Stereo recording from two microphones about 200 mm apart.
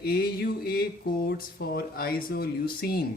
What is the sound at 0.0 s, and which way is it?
Speech, 50° left (ahead or behind).